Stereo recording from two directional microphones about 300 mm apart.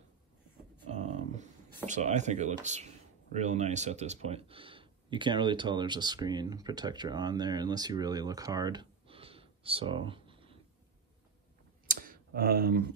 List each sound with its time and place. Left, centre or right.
0.8 s a sound: right
1.9 s speech: right
11.9 s clicking: right